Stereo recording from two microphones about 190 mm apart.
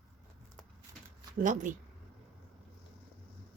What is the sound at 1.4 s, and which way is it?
Speech, 45° right (ahead or behind).